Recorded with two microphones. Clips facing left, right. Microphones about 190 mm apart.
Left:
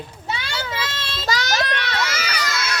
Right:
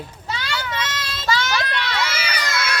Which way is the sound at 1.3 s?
40° left (ahead or behind).